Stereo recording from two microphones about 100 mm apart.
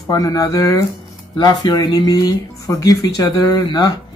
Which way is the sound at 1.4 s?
45° left (ahead or behind).